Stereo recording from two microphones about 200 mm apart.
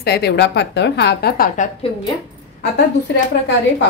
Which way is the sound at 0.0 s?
55° left (ahead or behind).